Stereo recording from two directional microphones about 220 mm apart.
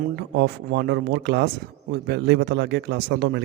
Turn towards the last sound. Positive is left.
turn(degrees=-50)  # may be behind; listen again after turning